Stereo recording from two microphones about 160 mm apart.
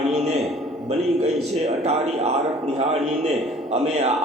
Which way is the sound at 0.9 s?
45° right (ahead or behind).